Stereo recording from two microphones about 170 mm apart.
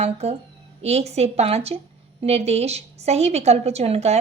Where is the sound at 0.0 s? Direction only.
40° right (ahead or behind).